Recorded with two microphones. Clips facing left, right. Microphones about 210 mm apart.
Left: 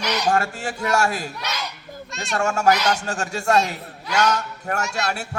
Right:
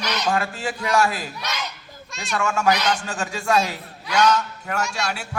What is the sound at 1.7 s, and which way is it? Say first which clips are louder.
Children playing: left 6 dB; 50° left (ahead or behind).